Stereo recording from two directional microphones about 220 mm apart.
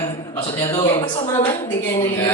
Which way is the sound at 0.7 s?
20° left (ahead or behind).